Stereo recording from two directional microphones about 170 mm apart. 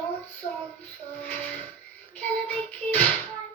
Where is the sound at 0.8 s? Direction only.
10° left (ahead or behind).